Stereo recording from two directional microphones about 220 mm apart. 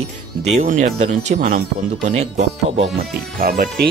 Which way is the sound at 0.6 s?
35° right (ahead or behind).